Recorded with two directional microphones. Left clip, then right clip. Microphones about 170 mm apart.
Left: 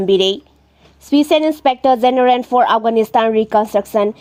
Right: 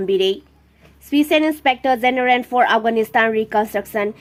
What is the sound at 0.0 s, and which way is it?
A woman's voice, 45° left (ahead or behind).